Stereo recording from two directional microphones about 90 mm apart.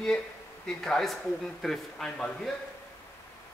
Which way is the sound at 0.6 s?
5° left (ahead or behind).